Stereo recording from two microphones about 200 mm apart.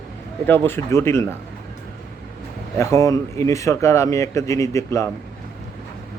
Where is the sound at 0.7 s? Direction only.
15° left (ahead or behind).